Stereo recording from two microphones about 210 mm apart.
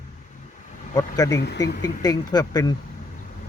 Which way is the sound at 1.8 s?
20° left (ahead or behind).